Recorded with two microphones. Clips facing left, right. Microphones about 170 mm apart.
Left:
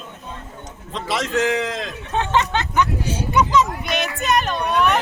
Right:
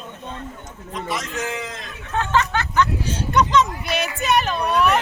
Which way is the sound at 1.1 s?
85° left.